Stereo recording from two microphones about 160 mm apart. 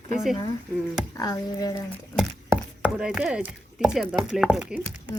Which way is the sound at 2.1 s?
Centre (ahead or behind).